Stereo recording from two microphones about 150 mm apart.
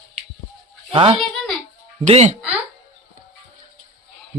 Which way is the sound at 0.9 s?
35° right (ahead or behind).